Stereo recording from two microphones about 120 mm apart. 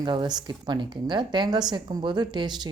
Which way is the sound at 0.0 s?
40° right (ahead or behind).